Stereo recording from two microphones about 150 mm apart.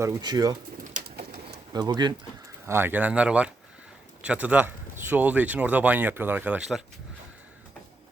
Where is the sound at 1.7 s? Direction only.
30° right (ahead or behind).